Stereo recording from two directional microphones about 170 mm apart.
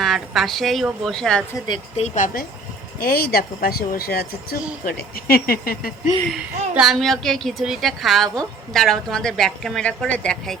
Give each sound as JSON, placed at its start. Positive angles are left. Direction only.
{"t": 0.0, "sound": "a woman's voice", "side_deg": 0}
{"t": 2.0, "sound": "speech", "side_deg": 50}
{"t": 6.3, "sound": "a woman's voice", "side_deg": 0}